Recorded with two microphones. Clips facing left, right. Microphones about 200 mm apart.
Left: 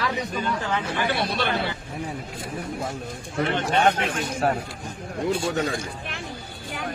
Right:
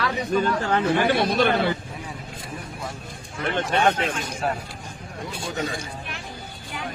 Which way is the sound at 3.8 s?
50° left (ahead or behind).